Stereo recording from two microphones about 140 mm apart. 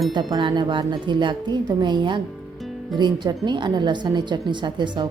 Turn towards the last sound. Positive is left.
turn(degrees=-30)  # may be behind; listen again after turning